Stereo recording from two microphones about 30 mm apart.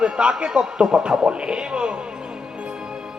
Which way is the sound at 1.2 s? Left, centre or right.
Right.